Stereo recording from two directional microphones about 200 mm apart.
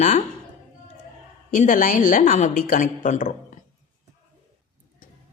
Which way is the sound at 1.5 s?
40° left (ahead or behind).